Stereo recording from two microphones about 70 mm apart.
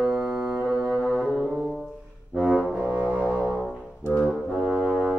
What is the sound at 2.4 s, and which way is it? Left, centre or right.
Music, centre.